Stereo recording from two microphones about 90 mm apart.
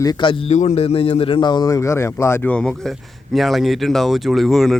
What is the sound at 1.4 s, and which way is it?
Speech, 55° left (ahead or behind).